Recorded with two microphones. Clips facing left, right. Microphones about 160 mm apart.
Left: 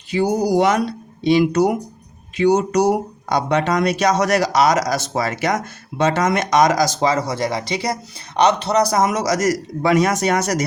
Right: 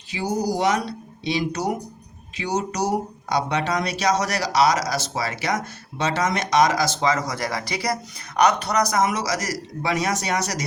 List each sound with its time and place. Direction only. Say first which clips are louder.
0.1 s speech: left 7 dB; 55° left (ahead or behind)